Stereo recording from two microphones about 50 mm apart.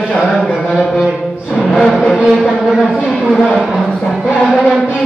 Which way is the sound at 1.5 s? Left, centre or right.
Centre.